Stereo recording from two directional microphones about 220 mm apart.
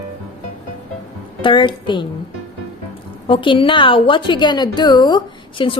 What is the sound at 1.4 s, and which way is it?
Speech, 20° left (ahead or behind).